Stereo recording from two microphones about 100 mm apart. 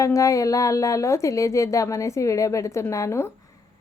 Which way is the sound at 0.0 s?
30° left (ahead or behind).